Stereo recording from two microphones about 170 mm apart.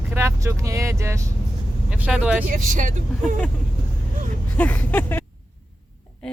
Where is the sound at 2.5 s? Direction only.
50° right (ahead or behind).